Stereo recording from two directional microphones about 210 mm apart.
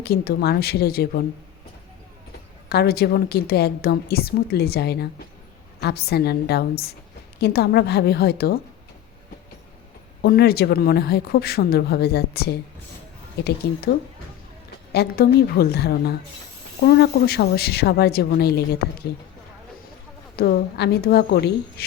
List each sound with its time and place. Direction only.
0.0 s a woman's voice: 50° left (ahead or behind)
2.6 s a woman's voice: 50° left (ahead or behind)
10.2 s a woman's voice: 50° left (ahead or behind)
13.6 s a woman's voice: 50° left (ahead or behind)
14.9 s a woman's voice: 45° left (ahead or behind)
20.3 s a woman's voice: 50° left (ahead or behind)